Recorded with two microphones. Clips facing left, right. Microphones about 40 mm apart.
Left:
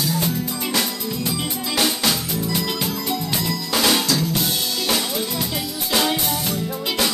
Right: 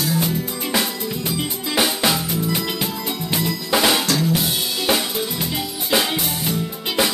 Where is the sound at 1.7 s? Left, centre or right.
Centre.